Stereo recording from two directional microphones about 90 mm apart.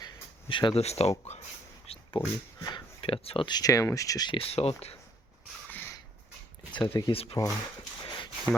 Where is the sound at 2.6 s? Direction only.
55° left (ahead or behind).